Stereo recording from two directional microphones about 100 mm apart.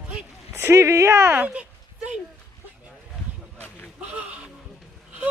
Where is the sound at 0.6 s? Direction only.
25° right (ahead or behind).